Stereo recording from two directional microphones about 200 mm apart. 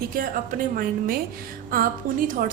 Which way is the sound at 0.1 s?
45° right (ahead or behind).